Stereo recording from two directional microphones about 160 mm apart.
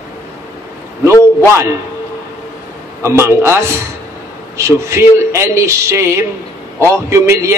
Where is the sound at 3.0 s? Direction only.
15° right (ahead or behind).